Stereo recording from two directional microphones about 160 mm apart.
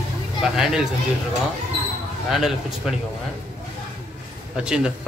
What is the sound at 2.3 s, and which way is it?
Speech, centre (ahead or behind).